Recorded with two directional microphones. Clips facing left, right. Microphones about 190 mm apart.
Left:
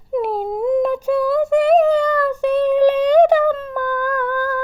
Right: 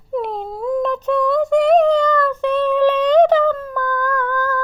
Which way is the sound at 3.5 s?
25° left (ahead or behind).